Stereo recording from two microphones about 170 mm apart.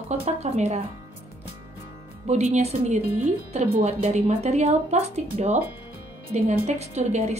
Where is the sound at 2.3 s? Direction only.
40° right (ahead or behind).